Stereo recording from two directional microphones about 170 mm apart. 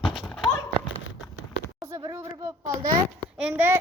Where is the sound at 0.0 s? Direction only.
Centre (ahead or behind).